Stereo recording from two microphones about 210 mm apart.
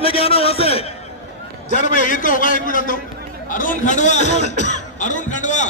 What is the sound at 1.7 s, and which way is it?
A man's voice, 40° left (ahead or behind).